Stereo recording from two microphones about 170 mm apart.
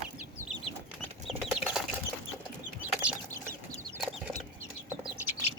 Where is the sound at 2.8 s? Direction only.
10° right (ahead or behind).